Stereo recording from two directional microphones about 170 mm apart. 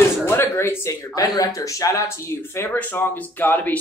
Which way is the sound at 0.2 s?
15° left (ahead or behind).